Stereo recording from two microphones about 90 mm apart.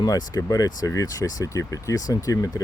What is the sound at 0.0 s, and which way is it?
Speech, 45° left (ahead or behind).